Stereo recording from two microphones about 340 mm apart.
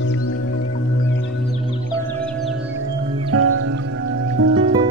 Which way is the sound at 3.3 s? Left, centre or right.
Right.